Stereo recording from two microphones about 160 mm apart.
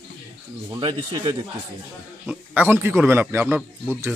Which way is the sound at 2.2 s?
10° right (ahead or behind).